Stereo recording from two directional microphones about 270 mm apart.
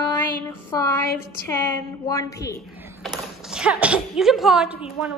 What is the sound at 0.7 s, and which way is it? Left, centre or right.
A woman's voice, centre.